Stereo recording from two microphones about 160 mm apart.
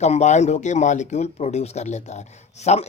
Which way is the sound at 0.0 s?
45° left (ahead or behind).